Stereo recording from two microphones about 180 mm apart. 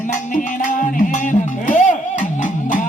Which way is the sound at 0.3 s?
45° left (ahead or behind).